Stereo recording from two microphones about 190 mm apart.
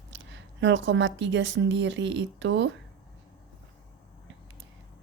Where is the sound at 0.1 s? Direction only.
75° right (ahead or behind).